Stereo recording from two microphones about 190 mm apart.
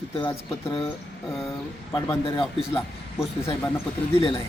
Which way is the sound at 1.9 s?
20° left (ahead or behind).